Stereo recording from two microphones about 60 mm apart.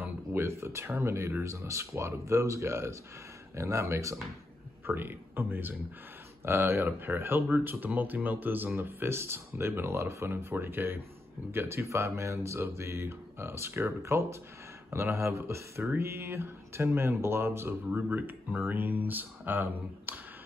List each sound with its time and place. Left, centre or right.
0.0 s speech: right
4.8 s a man's voice: right
17.9 s speech: right